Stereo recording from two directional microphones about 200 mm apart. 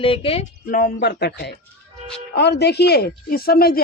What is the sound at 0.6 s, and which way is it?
Speech, 45° left (ahead or behind).